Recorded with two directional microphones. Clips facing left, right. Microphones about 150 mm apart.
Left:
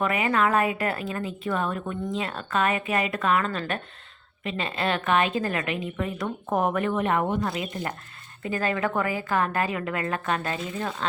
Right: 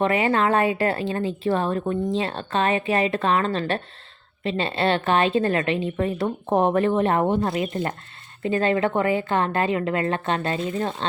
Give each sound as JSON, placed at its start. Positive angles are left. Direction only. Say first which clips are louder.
{"t": 0.0, "sound": "a woman's voice", "louder": "right 3 dB", "side_deg": -30}
{"t": 10.6, "sound": "a woman's voice", "louder": "right 6 dB", "side_deg": -45}